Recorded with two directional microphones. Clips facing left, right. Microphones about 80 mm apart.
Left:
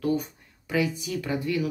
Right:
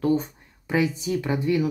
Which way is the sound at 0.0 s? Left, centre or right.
Right.